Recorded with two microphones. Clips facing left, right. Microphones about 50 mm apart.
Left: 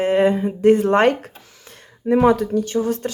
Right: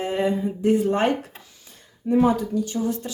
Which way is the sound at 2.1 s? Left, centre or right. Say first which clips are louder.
Left 4 dB; left.